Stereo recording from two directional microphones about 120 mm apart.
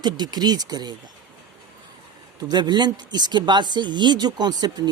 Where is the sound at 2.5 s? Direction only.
35° right (ahead or behind).